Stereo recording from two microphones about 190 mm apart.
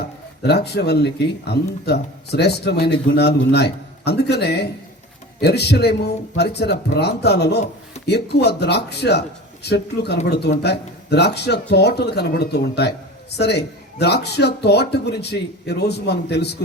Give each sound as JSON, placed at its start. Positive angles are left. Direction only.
{"t": 0.4, "sound": "speech", "side_deg": 60}